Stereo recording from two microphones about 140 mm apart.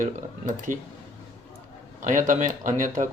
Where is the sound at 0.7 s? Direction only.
70° right (ahead or behind).